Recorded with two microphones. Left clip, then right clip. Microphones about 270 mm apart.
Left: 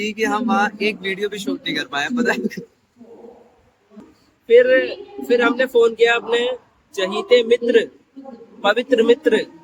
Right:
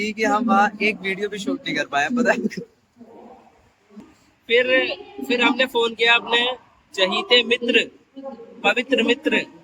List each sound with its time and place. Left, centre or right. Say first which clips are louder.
0.0 s speech: even; centre
4.4 s a man's voice: left 5 dB; centre